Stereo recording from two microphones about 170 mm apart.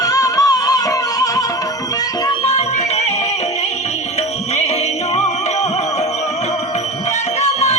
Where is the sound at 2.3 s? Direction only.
35° left (ahead or behind).